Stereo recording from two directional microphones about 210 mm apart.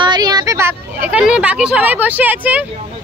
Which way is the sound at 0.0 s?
20° right (ahead or behind).